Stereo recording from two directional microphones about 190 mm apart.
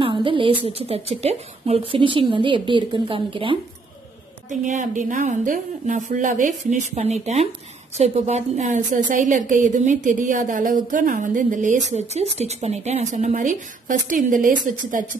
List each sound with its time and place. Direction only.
0.0 s a sound: 25° right (ahead or behind)
0.7 s a woman's voice: 30° right (ahead or behind)
4.5 s a woman's voice: 40° right (ahead or behind)